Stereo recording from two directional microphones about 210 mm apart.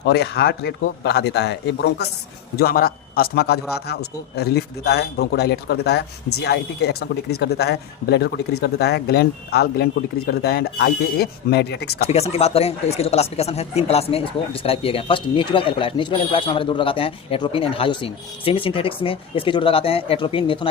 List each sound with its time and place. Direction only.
0.0 s a man's voice: 50° left (ahead or behind)
12.0 s speech: 30° left (ahead or behind)